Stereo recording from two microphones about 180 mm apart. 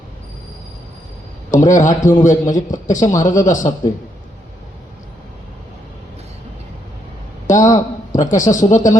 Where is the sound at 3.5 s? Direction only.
45° left (ahead or behind).